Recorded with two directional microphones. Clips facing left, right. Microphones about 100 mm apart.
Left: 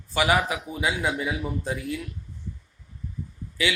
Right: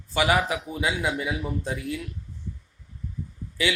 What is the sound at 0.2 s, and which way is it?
Speech, 25° left (ahead or behind).